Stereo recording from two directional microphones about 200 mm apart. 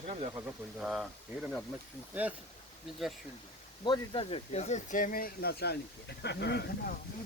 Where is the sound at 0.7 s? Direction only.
Centre (ahead or behind).